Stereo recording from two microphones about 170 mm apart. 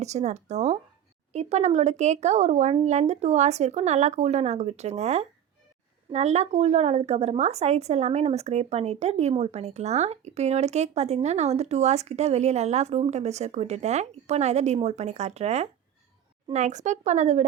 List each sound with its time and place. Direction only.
0.0 s a woman's voice: 40° right (ahead or behind)